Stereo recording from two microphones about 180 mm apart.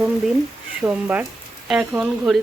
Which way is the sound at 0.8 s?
10° right (ahead or behind).